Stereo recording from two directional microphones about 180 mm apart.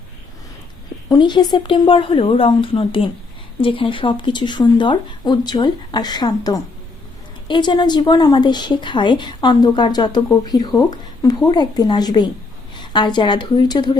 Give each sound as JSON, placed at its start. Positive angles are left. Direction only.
{"t": 1.1, "sound": "a woman's voice", "side_deg": 25}